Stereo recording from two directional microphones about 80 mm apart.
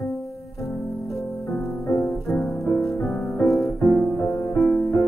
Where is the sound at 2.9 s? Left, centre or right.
Left.